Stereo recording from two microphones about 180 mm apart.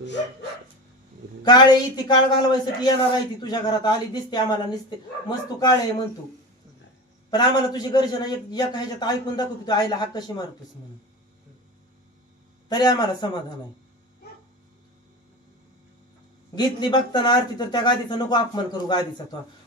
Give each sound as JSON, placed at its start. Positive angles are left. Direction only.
{"t": 1.4, "sound": "a man's voice", "side_deg": 25}
{"t": 7.2, "sound": "a man's voice", "side_deg": 20}
{"t": 12.6, "sound": "a man's voice", "side_deg": 20}
{"t": 16.5, "sound": "a man's voice", "side_deg": 25}